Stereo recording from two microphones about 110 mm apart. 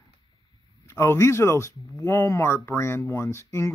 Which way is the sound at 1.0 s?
25° left (ahead or behind).